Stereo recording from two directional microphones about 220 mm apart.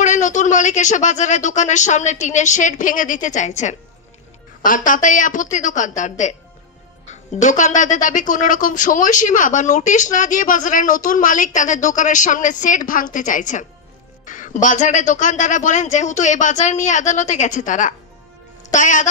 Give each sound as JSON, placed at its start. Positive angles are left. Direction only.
{"t": 0.0, "sound": "a woman's voice", "side_deg": 35}